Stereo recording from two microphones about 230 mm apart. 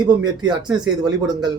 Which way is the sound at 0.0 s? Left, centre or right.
Centre.